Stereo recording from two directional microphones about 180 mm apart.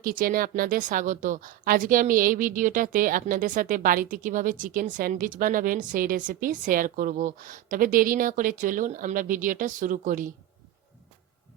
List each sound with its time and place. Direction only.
0.0 s a woman's voice: 50° right (ahead or behind)